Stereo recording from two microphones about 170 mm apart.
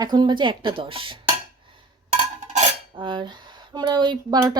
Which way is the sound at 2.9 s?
30° right (ahead or behind).